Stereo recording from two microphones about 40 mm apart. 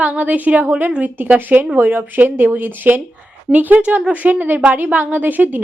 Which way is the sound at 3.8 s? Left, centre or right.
Right.